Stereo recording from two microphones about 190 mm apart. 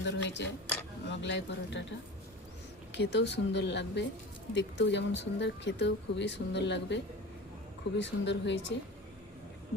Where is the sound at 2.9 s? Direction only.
65° left (ahead or behind).